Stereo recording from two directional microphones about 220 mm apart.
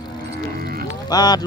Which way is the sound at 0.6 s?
45° right (ahead or behind).